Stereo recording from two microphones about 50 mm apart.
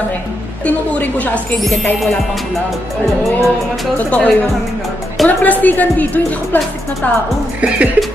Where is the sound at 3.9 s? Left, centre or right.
Left.